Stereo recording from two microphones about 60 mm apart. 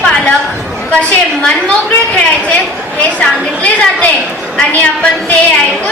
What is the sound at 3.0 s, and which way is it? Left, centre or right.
A woman's voice, left.